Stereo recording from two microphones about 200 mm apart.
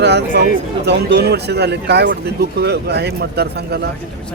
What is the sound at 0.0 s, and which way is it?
Speech, 55° right (ahead or behind).